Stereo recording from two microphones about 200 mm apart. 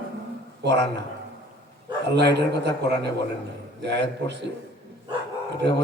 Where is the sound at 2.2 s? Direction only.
60° right (ahead or behind).